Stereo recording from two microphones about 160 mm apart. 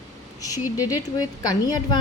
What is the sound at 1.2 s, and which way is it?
Speech, 25° left (ahead or behind).